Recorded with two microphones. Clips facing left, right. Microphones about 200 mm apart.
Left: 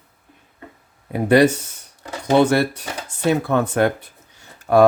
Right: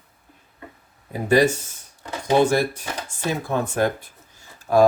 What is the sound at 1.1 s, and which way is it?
Speech, 65° left (ahead or behind).